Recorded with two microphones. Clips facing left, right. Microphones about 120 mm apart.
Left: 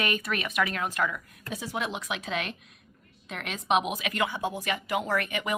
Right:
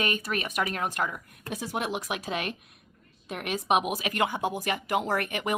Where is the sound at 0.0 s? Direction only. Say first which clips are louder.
Even; 40° right (ahead or behind).